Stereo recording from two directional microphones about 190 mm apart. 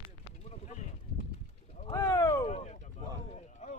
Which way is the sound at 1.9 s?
15° left (ahead or behind).